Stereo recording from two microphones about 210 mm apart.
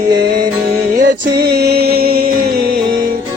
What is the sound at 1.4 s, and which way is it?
Music, 50° right (ahead or behind).